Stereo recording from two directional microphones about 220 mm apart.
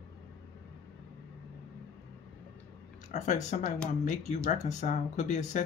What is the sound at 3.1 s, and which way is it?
Speech, 30° left (ahead or behind).